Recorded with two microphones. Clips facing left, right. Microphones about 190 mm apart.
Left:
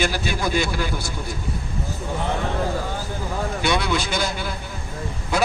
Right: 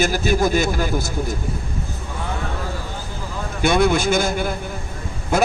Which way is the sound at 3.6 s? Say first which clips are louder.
Right 8 dB; 50° right (ahead or behind).